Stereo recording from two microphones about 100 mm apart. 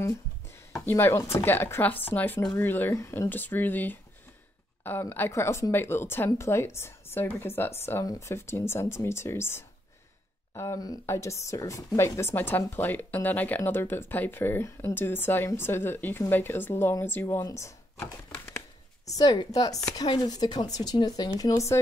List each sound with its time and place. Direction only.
0.7 s speech: 25° left (ahead or behind)
5.1 s a woman's voice: 25° left (ahead or behind)
17.4 s speech: 35° left (ahead or behind)
18.0 s a sound: 20° left (ahead or behind)
19.0 s a woman's voice: 40° left (ahead or behind)